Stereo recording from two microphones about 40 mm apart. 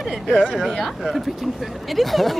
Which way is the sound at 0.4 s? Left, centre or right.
Centre.